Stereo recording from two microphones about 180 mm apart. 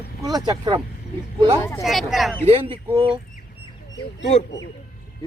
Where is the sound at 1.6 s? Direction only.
10° left (ahead or behind).